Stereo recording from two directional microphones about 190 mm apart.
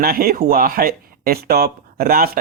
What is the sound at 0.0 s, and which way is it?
Speech, 50° right (ahead or behind).